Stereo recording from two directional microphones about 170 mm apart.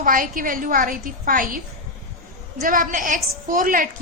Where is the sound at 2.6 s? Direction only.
55° right (ahead or behind).